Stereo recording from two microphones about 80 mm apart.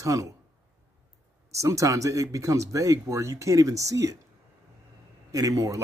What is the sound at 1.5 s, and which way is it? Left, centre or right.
Speech, right.